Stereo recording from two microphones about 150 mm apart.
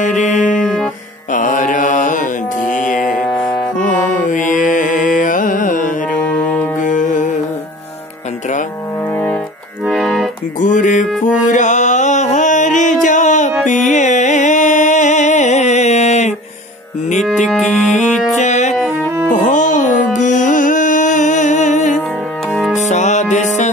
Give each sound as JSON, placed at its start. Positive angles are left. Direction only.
{"t": 0.0, "sound": "music", "side_deg": 55}
{"t": 1.3, "sound": "mantra", "side_deg": 60}
{"t": 2.7, "sound": "music", "side_deg": 60}
{"t": 3.0, "sound": "a sound", "side_deg": 0}
{"t": 3.7, "sound": "music", "side_deg": 60}
{"t": 9.8, "sound": "accordion", "side_deg": 0}
{"t": 10.6, "sound": "music", "side_deg": 60}
{"t": 17.6, "sound": "music", "side_deg": 55}